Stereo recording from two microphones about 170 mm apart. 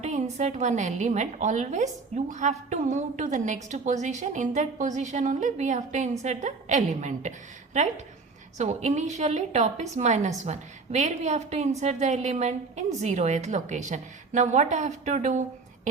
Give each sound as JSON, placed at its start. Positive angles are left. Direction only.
{"t": 0.0, "sound": "a woman's voice", "side_deg": -40}